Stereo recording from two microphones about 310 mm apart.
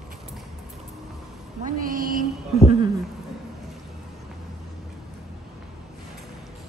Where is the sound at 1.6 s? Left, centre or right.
Right.